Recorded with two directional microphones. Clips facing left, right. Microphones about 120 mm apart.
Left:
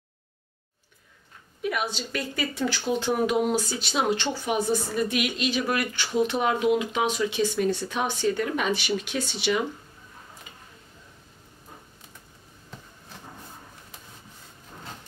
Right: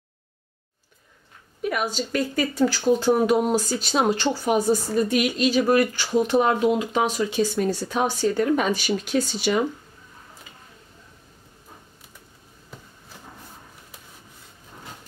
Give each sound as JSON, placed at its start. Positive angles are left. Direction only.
{"t": 1.6, "sound": "speech", "side_deg": -45}